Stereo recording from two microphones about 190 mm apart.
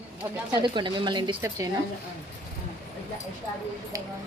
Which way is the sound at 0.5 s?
25° right (ahead or behind).